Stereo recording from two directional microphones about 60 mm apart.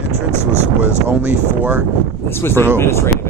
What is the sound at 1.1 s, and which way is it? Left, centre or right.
Speech, right.